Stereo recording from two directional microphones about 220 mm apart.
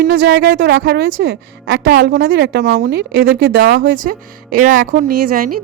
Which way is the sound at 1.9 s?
45° right (ahead or behind).